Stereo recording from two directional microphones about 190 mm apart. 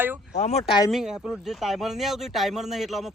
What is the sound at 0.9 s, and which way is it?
Speech, centre (ahead or behind).